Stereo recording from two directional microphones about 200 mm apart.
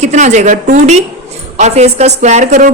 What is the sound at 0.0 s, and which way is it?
A woman's voice, 35° right (ahead or behind).